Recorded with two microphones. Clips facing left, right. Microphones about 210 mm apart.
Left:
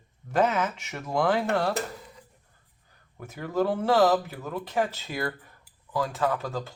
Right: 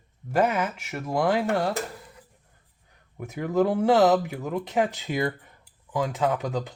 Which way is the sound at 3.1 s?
15° right (ahead or behind).